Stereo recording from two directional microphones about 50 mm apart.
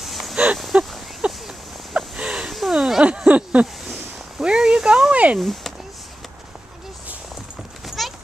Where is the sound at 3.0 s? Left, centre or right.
Right.